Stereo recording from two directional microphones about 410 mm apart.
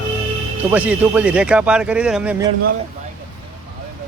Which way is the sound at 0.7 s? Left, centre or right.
Centre.